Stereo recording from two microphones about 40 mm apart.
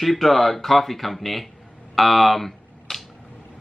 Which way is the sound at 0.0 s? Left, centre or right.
Centre.